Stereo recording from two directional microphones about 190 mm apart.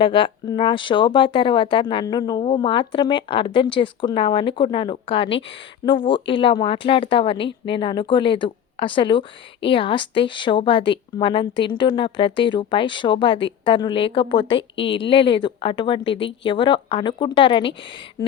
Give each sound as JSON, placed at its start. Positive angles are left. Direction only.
{"t": 0.0, "sound": "speech", "side_deg": 25}